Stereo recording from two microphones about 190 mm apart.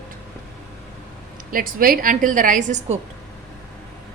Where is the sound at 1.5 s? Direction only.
50° right (ahead or behind).